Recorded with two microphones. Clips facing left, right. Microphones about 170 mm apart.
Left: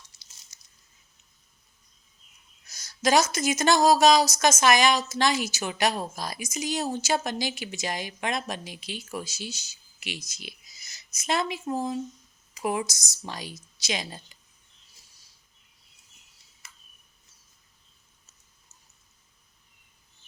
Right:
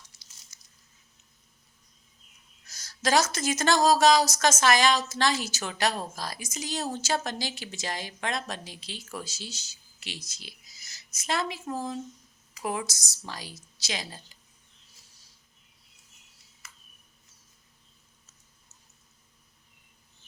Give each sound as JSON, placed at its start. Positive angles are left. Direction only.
{"t": 0.1, "sound": "a sound", "side_deg": 25}
{"t": 0.5, "sound": "biting", "side_deg": 25}
{"t": 2.6, "sound": "a woman's voice", "side_deg": 15}